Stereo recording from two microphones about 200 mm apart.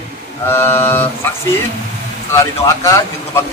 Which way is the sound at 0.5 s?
10° left (ahead or behind).